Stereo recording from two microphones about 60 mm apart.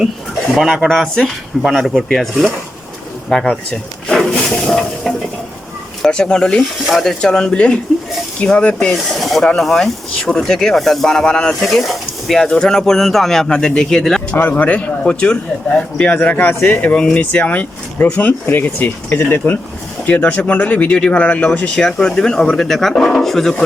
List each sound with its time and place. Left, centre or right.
0.5 s speech: centre
0.9 s speech: centre
1.6 s speech: centre
2.0 s speech: centre
3.2 s speech: centre
4.1 s hiss: centre
4.5 s speech: centre
8.9 s speech: centre
11.6 s speech: centre
14.5 s speech: left
21.8 s speech: centre